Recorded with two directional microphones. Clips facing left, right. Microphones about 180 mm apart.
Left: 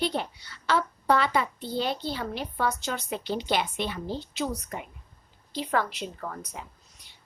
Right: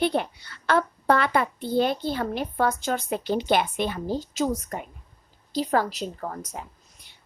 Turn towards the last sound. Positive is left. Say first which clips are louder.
# right 4 dB
turn(degrees=-40)  # may be behind; listen again after turning